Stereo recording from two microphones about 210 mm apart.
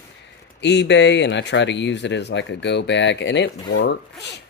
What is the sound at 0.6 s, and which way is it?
Speech, 55° left (ahead or behind).